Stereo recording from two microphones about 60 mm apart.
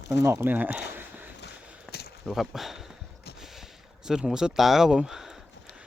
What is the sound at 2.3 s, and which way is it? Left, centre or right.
Speech, centre.